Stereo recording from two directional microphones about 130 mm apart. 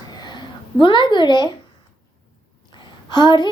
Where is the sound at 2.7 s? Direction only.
35° left (ahead or behind).